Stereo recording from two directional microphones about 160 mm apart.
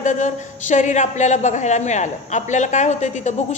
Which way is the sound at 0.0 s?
50° left (ahead or behind).